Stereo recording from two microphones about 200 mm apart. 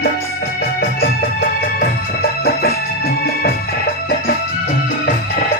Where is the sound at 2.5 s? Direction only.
50° left (ahead or behind).